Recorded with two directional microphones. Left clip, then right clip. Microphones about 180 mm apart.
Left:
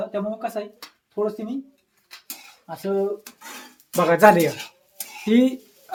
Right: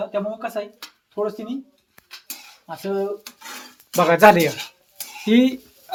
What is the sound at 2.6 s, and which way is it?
Speech, 10° right (ahead or behind).